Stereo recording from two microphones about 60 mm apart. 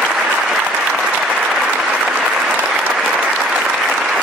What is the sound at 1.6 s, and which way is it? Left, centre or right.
Applause, centre.